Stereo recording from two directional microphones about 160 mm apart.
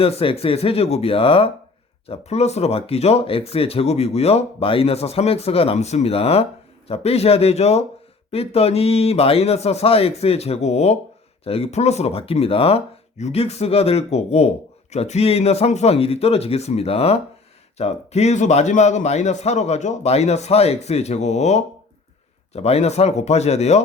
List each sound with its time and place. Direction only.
0.0 s a man's voice: 35° left (ahead or behind)